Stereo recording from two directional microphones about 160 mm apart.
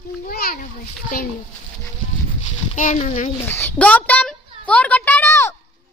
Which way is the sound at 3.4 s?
10° left (ahead or behind).